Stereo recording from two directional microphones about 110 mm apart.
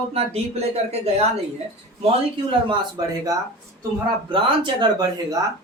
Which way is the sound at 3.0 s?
35° right (ahead or behind).